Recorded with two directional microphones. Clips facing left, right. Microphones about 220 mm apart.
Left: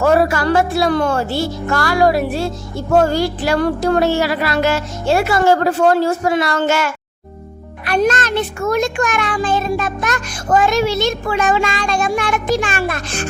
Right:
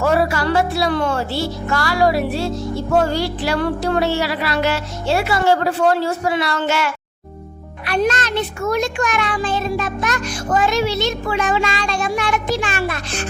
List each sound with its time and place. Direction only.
0.0 s speech: 50° left (ahead or behind)